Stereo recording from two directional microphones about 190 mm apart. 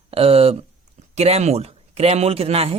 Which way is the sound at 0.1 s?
30° right (ahead or behind).